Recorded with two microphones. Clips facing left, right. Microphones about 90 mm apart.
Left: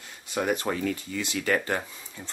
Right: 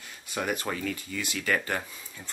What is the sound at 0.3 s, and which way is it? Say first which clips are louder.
Speech: left 4 dB; 20° left (ahead or behind).